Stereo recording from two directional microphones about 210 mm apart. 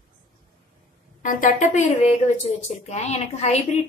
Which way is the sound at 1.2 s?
40° left (ahead or behind).